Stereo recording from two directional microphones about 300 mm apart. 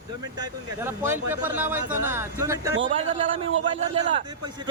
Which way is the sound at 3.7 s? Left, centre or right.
Centre.